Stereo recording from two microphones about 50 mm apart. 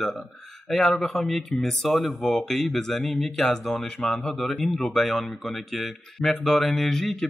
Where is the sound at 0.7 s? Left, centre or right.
Centre.